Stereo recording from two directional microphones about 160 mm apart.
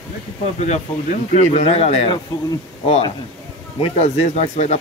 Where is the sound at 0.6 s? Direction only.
45° left (ahead or behind).